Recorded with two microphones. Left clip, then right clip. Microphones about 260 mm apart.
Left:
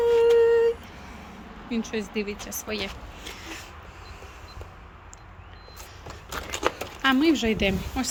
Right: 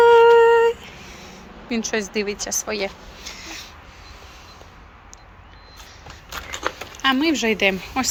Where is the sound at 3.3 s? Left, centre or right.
Centre.